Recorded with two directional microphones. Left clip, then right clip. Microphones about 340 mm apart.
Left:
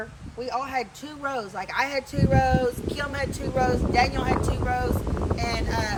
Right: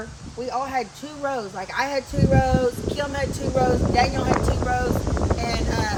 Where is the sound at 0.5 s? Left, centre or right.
Centre.